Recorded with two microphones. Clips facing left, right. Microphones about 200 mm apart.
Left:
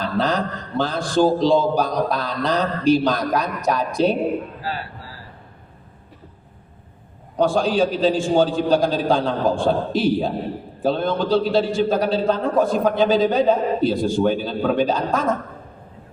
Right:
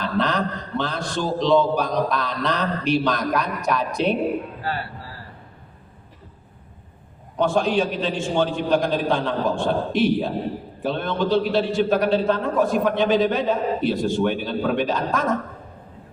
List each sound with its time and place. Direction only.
0.2 s a man's voice: 35° left (ahead or behind)
7.3 s a man's voice: 30° left (ahead or behind)